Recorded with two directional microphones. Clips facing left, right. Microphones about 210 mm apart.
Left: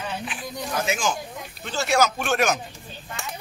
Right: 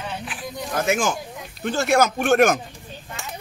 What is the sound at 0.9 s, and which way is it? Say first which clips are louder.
Speech: right 4 dB; 55° right (ahead or behind).